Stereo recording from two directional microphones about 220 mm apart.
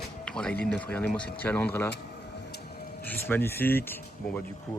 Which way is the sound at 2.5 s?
45° left (ahead or behind).